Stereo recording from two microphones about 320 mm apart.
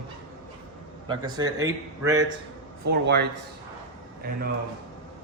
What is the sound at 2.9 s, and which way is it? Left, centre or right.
Speech, right.